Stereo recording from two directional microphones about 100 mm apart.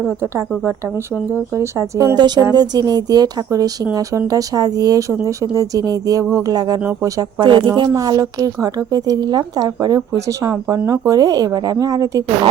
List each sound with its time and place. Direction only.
0.1 s a woman's voice: 25° right (ahead or behind)
2.1 s a woman's voice: 45° right (ahead or behind)
7.4 s speech: 55° right (ahead or behind)
7.7 s a woman's voice: 40° right (ahead or behind)